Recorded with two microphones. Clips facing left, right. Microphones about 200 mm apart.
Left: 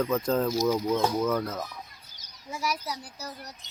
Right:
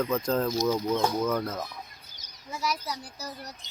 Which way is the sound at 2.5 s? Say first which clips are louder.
Even; 10° left (ahead or behind).